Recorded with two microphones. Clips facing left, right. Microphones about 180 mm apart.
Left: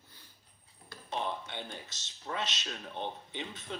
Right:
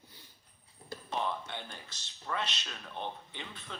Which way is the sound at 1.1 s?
20° left (ahead or behind).